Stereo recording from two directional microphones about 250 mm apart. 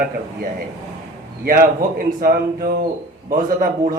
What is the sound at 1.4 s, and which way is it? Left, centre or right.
A man's voice, right.